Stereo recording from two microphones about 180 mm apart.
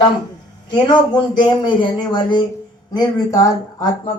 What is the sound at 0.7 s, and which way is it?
A man's voice, 25° left (ahead or behind).